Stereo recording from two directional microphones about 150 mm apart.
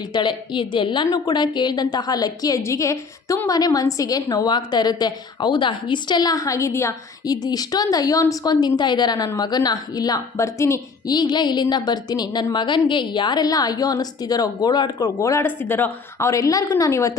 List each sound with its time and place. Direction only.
0.1 s a woman's voice: 30° left (ahead or behind)